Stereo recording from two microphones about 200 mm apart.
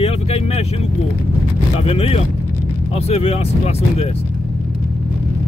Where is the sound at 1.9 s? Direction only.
30° left (ahead or behind).